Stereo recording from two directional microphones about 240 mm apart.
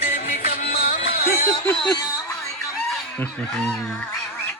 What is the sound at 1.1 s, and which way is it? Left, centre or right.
Music, left.